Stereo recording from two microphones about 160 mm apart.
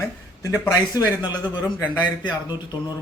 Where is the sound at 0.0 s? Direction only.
20° left (ahead or behind).